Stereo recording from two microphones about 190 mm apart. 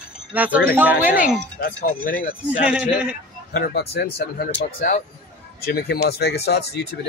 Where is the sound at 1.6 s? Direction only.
50° left (ahead or behind).